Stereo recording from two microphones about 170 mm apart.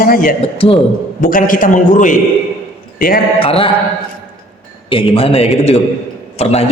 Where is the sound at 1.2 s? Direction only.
55° left (ahead or behind).